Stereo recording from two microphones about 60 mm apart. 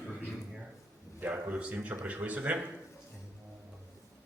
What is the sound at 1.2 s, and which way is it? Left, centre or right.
A man's voice, right.